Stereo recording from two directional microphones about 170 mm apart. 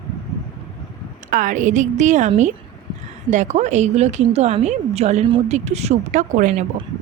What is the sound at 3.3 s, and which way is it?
A woman's voice, 45° right (ahead or behind).